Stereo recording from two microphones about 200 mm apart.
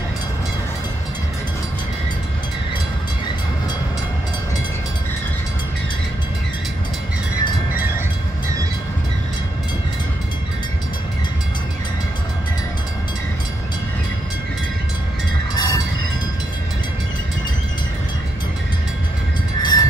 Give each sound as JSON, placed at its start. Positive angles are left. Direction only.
{"t": 15.5, "sound": "train", "side_deg": 20}
{"t": 19.6, "sound": "train", "side_deg": 20}